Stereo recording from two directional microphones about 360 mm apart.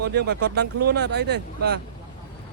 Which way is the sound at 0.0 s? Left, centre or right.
Right.